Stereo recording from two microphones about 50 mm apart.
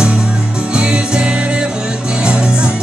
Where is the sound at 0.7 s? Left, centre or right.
Centre.